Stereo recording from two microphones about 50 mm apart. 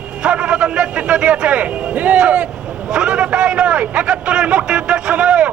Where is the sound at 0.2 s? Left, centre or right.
Centre.